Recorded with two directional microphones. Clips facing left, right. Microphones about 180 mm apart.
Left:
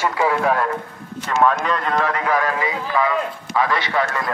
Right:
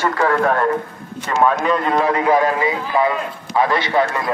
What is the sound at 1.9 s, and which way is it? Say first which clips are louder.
A man's voice: right 5 dB; 20° right (ahead or behind).